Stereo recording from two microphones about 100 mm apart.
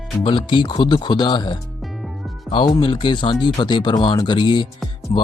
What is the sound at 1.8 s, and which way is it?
Music, centre (ahead or behind).